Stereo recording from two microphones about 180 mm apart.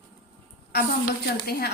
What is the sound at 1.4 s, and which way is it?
Speech, 55° left (ahead or behind).